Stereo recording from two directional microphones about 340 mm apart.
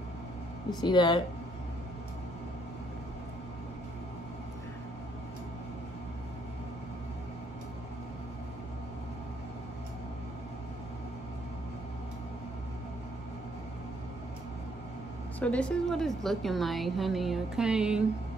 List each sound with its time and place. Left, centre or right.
0.7 s speech: centre
15.3 s a woman's voice: centre